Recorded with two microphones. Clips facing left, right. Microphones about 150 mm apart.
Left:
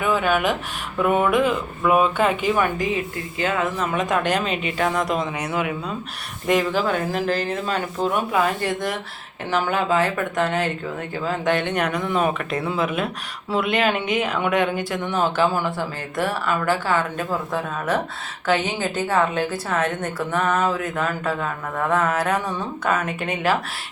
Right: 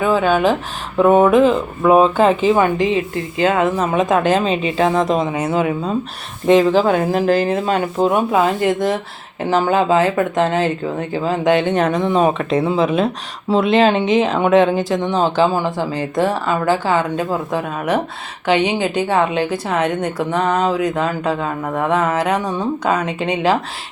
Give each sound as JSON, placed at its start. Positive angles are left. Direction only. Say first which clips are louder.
{"t": 0.0, "sound": "speech", "louder": "right 6 dB", "side_deg": -30}
{"t": 3.4, "sound": "a woman's voice", "louder": "right 7 dB", "side_deg": -35}
{"t": 8.3, "sound": "a woman's voice", "louder": "right 6 dB", "side_deg": -25}